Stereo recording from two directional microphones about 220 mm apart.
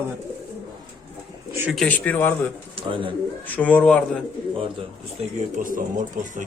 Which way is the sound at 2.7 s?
25° right (ahead or behind).